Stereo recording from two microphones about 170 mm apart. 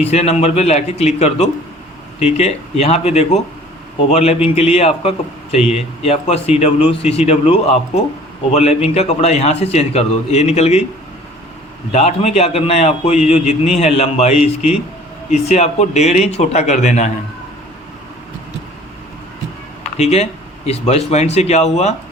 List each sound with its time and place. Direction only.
0.0 s a man's voice: 35° left (ahead or behind)
11.9 s a man's voice: 40° left (ahead or behind)
19.8 s a sound: 40° left (ahead or behind)
20.7 s a man's voice: 40° left (ahead or behind)